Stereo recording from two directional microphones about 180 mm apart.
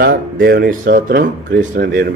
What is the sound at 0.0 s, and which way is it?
Speech, 60° right (ahead or behind).